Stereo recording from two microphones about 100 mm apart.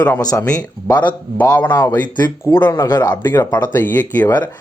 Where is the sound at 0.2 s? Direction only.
40° left (ahead or behind).